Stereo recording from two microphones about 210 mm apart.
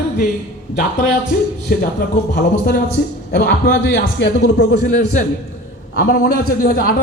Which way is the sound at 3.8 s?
55° left (ahead or behind).